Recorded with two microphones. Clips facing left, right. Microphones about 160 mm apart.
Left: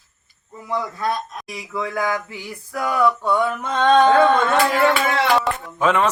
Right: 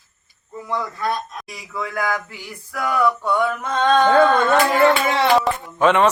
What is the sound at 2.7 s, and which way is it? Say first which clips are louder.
Male singing: even; 20° left (ahead or behind).